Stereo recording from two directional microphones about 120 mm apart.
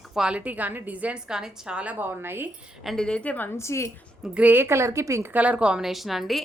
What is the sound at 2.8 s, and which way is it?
A woman's voice, centre (ahead or behind).